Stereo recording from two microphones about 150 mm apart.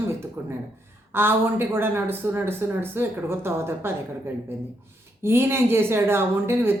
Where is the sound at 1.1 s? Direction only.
15° right (ahead or behind).